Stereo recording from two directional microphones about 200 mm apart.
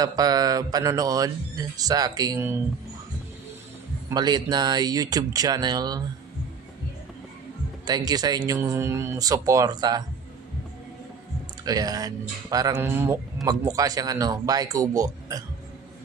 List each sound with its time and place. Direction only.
0.0 s speech: 20° right (ahead or behind)
4.1 s speech: 20° right (ahead or behind)
7.8 s speech: 20° right (ahead or behind)
11.6 s a man's voice: 20° right (ahead or behind)